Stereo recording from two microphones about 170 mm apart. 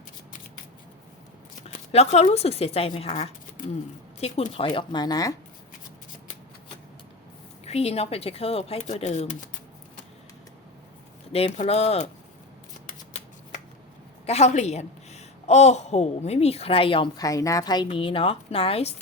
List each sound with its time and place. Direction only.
1.9 s a woman's voice: 40° left (ahead or behind); by 5.3 s 20° left (ahead or behind)
7.6 s a woman's voice: 35° left (ahead or behind)
11.3 s a woman's voice: 40° left (ahead or behind)
14.3 s a woman's voice: 40° left (ahead or behind)